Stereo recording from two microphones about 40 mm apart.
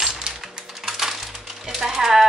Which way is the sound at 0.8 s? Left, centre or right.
Centre.